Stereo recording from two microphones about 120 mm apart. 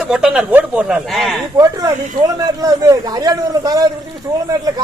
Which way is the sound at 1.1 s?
Centre (ahead or behind).